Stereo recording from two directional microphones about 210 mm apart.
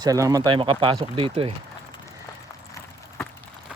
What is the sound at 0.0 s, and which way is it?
Speech, 15° right (ahead or behind).